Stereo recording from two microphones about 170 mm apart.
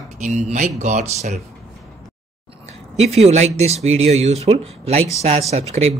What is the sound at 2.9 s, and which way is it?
Speech, 40° right (ahead or behind).